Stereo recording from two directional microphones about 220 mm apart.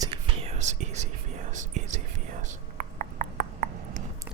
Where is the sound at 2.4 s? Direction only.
35° right (ahead or behind).